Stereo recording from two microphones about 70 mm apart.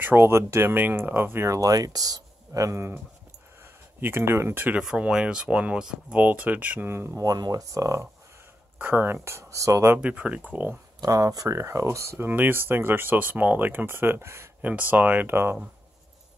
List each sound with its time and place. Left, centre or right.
0.0 s speech: right
1.5 s speech: right
4.0 s speech: right
4.9 s speech: centre; by 7.1 s right
7.2 s speech: right
7.7 s speech: right
8.7 s speech: right
9.9 s speech: centre
11.0 s speech: right
14.6 s speech: right